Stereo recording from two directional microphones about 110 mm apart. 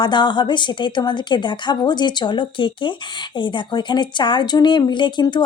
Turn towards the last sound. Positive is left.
turn(degrees=45)  # may be behind; listen again after turning